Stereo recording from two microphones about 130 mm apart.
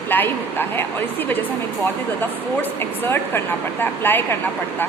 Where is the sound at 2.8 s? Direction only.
15° left (ahead or behind).